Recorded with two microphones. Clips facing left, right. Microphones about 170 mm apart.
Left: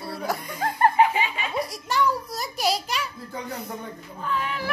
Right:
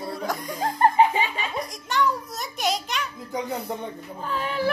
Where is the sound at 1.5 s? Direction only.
5° left (ahead or behind).